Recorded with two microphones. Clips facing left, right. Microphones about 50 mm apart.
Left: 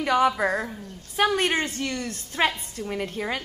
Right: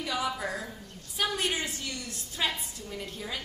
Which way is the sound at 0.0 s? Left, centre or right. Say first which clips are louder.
Left 10 dB; left.